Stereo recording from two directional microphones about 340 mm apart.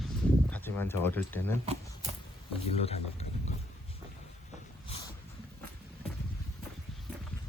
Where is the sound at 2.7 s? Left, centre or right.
Centre.